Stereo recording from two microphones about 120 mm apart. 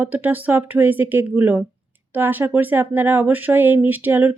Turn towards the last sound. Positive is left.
turn(degrees=-15)  # may be behind; listen again after turning